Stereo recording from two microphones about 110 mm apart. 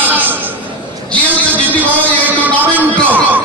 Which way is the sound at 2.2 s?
15° right (ahead or behind).